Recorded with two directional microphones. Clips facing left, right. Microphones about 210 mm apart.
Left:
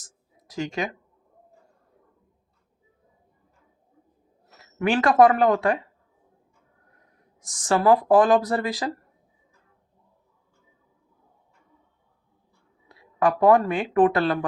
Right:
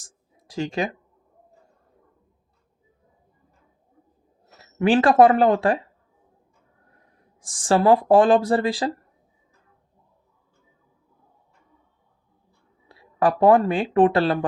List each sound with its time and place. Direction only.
0.0 s a sound: 30° right (ahead or behind)
4.6 s speech: 30° right (ahead or behind)
7.4 s speech: 30° right (ahead or behind)
12.9 s speech: 35° right (ahead or behind)